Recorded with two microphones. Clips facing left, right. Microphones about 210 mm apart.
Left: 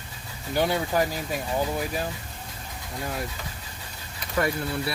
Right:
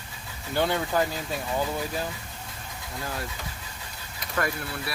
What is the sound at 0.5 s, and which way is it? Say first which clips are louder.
Speech: left 1 dB; 15° left (ahead or behind).